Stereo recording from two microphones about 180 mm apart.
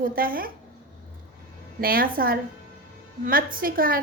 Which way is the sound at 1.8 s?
55° right (ahead or behind).